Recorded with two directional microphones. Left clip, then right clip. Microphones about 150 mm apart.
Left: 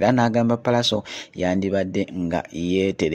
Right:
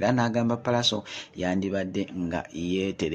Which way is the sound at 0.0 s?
45° left (ahead or behind).